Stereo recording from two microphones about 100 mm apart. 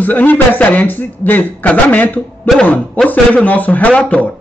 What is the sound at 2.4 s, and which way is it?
A man's voice, 5° left (ahead or behind).